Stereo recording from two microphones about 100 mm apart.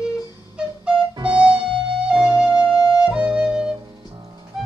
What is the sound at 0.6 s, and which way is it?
Flute, 10° right (ahead or behind).